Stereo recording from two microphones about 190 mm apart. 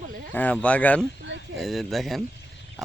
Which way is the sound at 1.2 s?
70° right (ahead or behind).